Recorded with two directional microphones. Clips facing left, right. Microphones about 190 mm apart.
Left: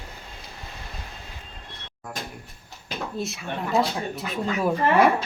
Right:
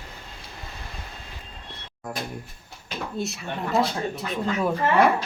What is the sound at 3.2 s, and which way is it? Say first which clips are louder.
Speech: right 1 dB; centre (ahead or behind).